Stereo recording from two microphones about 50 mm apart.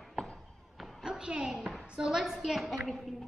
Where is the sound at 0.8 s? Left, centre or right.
Centre.